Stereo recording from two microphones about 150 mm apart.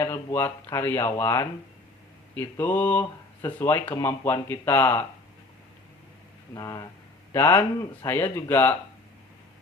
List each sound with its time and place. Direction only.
0.0 s speech: 15° left (ahead or behind)
6.5 s speech: 25° left (ahead or behind)